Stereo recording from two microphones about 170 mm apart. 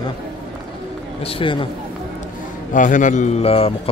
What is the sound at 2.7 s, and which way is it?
A man's voice, 50° left (ahead or behind).